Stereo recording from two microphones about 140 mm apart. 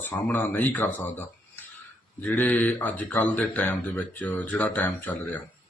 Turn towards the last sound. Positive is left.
turn(degrees=10)  # may be behind; listen again after turning